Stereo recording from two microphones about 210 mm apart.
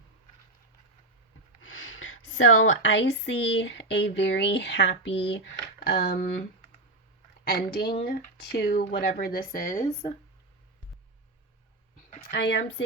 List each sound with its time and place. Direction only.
1.6 s a woman's voice: 70° left (ahead or behind); by 6.2 s 50° left (ahead or behind)
7.4 s speech: 45° left (ahead or behind); by 10.2 s 30° left (ahead or behind)
12.2 s speech: 50° left (ahead or behind)